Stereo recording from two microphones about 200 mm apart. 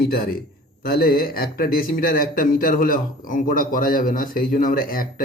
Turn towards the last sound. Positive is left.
turn(degrees=45)  # may be behind; listen again after turning